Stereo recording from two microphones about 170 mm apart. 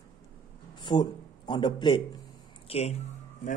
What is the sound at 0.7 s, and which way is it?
Speech, 25° left (ahead or behind).